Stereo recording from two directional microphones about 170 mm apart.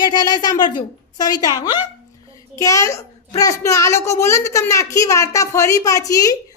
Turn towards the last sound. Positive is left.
turn(degrees=20)  # may be behind; listen again after turning